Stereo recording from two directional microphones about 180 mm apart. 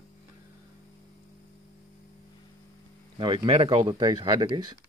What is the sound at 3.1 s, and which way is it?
Speech, 25° right (ahead or behind).